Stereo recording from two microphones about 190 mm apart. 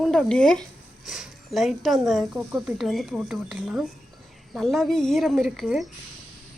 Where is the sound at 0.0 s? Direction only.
Centre (ahead or behind).